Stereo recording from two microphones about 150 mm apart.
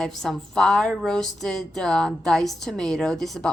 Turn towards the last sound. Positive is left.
turn(degrees=0)  # may be behind; listen again after turning